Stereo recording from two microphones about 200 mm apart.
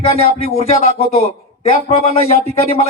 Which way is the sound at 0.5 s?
30° left (ahead or behind).